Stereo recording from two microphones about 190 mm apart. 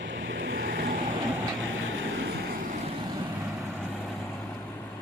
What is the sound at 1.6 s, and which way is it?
Vehicle, 90° right.